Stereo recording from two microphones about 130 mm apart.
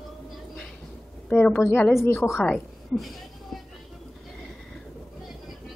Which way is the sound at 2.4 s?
5° left (ahead or behind).